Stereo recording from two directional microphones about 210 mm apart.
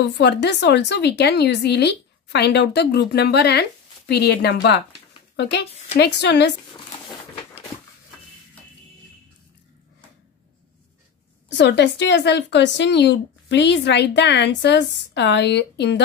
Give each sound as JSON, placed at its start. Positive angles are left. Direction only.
{"t": 0.0, "sound": "speech", "side_deg": 55}
{"t": 5.9, "sound": "speech", "side_deg": 55}
{"t": 11.4, "sound": "speech", "side_deg": 55}